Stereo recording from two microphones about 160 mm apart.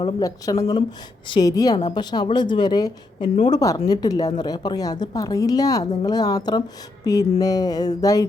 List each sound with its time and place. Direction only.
0.2 s a woman's voice: 20° left (ahead or behind)